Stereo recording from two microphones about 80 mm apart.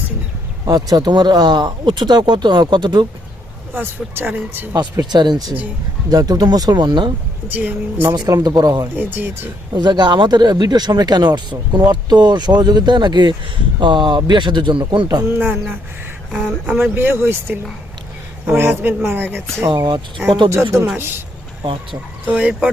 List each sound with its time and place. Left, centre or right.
0.7 s speech: right
3.8 s speech: right
4.7 s speech: right
6.1 s speech: right
7.4 s speech: right
8.1 s speech: right
9.0 s speech: right
9.7 s speech: right
13.7 s speech: right
15.2 s speech: right
16.6 s speech: right
19.7 s speech: right
20.5 s speech: right
22.3 s speech: centre